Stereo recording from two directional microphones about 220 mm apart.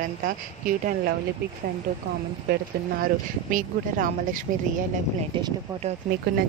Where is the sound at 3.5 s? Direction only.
35° right (ahead or behind).